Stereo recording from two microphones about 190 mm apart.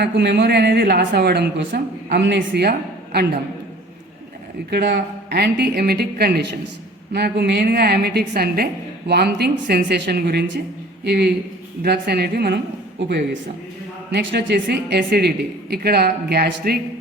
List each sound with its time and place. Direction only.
0.0 s a woman's voice: 60° right (ahead or behind)
4.7 s a woman's voice: 60° right (ahead or behind)
14.1 s a woman's voice: 65° right (ahead or behind)